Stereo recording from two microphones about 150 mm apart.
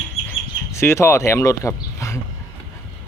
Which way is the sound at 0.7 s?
20° left (ahead or behind).